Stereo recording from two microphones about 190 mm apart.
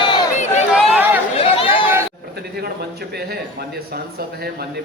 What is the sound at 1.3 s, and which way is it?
Chatter, 30° left (ahead or behind).